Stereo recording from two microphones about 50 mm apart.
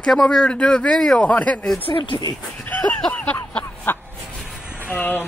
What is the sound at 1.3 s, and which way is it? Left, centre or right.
Speech, left.